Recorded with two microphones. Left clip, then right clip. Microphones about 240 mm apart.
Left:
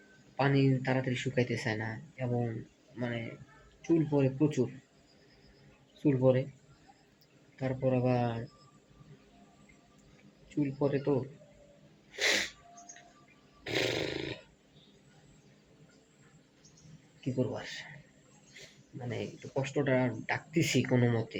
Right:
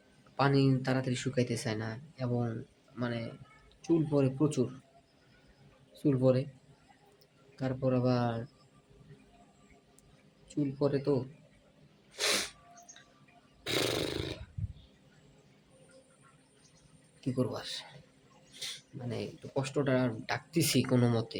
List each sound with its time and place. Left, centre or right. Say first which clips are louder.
0.3 s speech: right 1 dB; centre
6.0 s speech: left 1 dB; centre
7.8 s speech: left 1 dB; centre
10.5 s speech: even; centre
12.1 s sneeze: left 2 dB; centre
13.7 s roar: even; centre
17.3 s speech: even; centre
18.9 s speech: left 5 dB; centre